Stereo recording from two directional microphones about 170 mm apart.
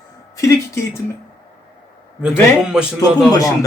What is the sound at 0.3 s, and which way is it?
Speech, 15° left (ahead or behind).